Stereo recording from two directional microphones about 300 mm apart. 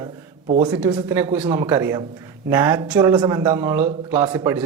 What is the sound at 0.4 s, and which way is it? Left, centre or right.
A man's voice, centre.